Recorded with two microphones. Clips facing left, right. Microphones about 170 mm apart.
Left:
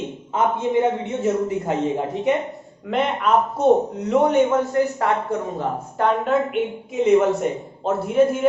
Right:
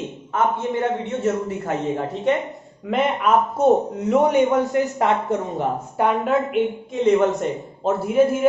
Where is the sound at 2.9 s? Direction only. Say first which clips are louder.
Right 1 dB; 5° right (ahead or behind).